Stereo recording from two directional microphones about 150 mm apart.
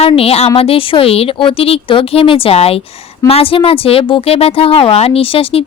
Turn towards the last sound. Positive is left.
turn(degrees=40)  # may be behind; listen again after turning